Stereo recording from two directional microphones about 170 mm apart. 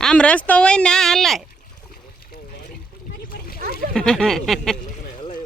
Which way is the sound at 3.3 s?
60° left (ahead or behind).